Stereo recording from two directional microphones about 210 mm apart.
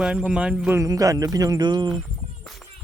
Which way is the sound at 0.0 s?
5° right (ahead or behind).